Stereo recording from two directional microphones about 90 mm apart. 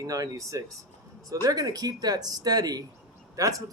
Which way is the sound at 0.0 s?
40° right (ahead or behind).